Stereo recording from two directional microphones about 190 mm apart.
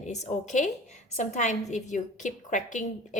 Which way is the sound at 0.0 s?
35° left (ahead or behind).